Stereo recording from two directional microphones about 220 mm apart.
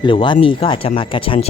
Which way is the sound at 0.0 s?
20° left (ahead or behind).